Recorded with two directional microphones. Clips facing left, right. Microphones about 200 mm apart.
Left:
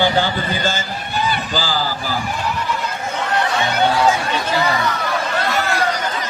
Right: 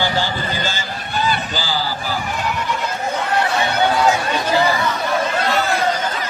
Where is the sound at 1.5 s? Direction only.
45° left (ahead or behind).